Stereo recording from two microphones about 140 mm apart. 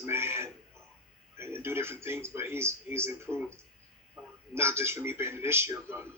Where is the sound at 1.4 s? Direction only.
15° right (ahead or behind).